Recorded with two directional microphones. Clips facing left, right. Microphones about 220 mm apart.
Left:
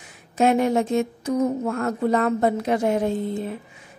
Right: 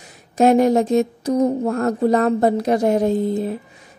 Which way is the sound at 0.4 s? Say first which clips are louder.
Right 5 dB; 40° right (ahead or behind).